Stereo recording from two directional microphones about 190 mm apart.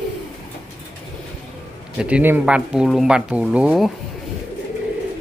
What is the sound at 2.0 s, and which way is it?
Speech, 10° right (ahead or behind).